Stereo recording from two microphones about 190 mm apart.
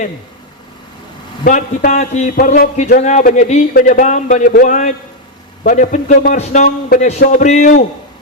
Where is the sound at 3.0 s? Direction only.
40° left (ahead or behind).